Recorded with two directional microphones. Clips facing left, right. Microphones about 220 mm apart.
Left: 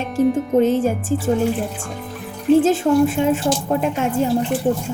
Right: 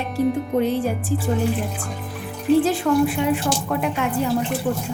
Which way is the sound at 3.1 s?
45° left (ahead or behind).